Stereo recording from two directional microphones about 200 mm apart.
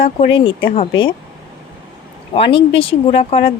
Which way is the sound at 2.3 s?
25° left (ahead or behind).